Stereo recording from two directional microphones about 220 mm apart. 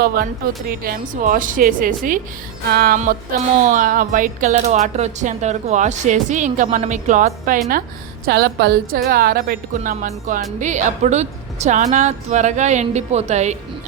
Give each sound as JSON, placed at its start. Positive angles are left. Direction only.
{"t": 0.7, "sound": "a woman's voice", "side_deg": -40}